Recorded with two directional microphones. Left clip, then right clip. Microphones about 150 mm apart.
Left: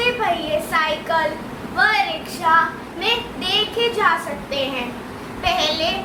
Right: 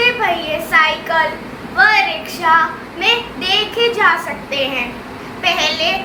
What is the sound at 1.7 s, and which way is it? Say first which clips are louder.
A woman's voice: right 6 dB; 15° left (ahead or behind).